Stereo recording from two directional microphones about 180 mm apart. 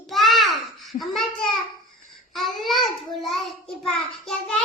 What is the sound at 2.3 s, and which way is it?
Child singing, centre (ahead or behind).